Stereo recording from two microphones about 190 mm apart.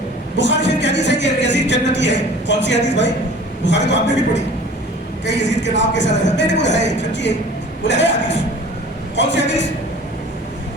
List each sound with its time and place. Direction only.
0.3 s speech: 70° left (ahead or behind)
5.2 s speech: 70° left (ahead or behind)